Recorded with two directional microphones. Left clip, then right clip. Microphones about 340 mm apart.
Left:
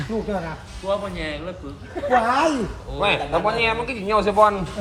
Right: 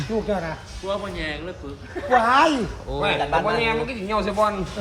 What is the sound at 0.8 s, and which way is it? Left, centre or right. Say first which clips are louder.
Speech: left 2 dB; centre.